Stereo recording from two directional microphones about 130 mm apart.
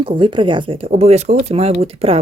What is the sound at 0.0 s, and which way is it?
Speech, 40° right (ahead or behind).